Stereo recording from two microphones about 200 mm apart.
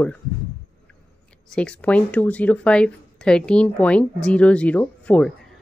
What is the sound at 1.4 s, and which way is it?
Speech, 5° left (ahead or behind).